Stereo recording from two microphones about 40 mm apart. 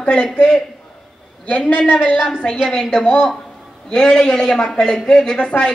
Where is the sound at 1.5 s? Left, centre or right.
Left; by 4.6 s centre.